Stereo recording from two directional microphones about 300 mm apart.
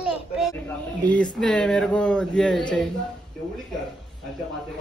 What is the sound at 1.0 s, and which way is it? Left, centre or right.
A man's voice, centre.